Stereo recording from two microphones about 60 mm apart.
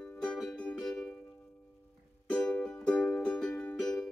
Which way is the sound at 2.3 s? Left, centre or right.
Centre.